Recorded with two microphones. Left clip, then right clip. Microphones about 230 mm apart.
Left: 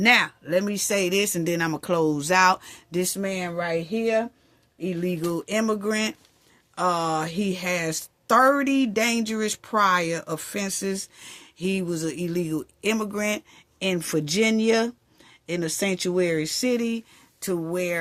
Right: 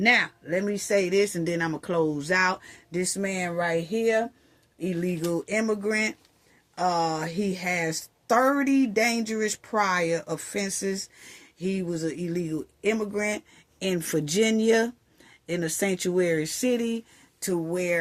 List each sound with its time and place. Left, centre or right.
0.0 s a woman's voice: left
13.7 s speech: centre
17.4 s speech: left